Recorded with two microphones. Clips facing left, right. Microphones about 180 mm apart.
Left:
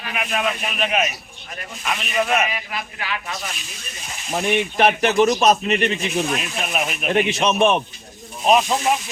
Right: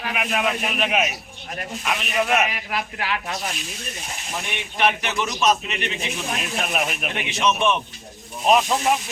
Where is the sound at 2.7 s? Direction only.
60° right (ahead or behind).